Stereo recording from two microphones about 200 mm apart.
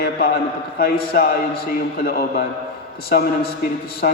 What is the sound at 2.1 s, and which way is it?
Speech, 55° left (ahead or behind).